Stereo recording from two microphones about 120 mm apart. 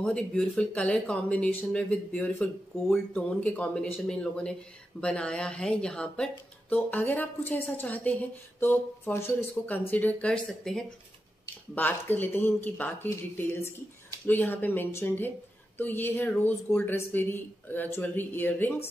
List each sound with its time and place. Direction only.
0.0 s speech: 5° left (ahead or behind)
11.7 s speech: 15° left (ahead or behind)